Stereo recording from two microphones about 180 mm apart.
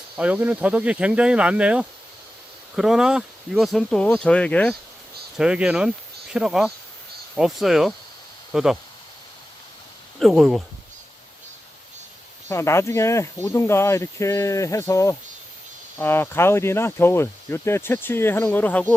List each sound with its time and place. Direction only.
0.2 s speech: 10° right (ahead or behind)
5.4 s speech: 5° right (ahead or behind)
10.2 s speech: centre (ahead or behind)
12.5 s speech: 15° left (ahead or behind)